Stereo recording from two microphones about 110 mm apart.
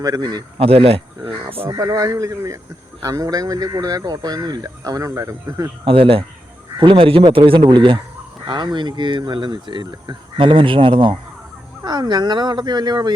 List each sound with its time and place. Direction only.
0.0 s speech: 40° right (ahead or behind)
0.6 s speech: 60° right (ahead or behind)
1.7 s speech: 35° right (ahead or behind)
5.8 s speech: 55° right (ahead or behind)
7.6 s speech: 45° right (ahead or behind)